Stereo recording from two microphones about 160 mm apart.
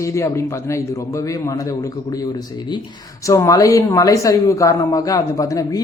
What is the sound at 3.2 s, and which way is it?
Speech, 20° left (ahead or behind).